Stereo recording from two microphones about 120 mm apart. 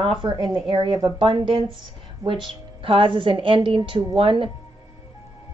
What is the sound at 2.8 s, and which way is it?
A woman's voice, 45° right (ahead or behind).